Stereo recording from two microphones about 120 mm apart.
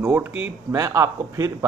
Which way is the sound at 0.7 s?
25° right (ahead or behind).